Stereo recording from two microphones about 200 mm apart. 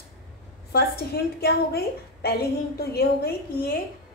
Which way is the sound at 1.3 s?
50° left (ahead or behind).